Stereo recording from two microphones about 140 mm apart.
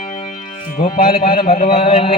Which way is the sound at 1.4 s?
50° left (ahead or behind).